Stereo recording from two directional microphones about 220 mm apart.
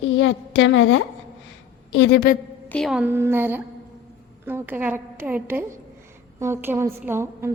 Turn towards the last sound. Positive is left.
turn(degrees=-10)  # may be behind; listen again after turning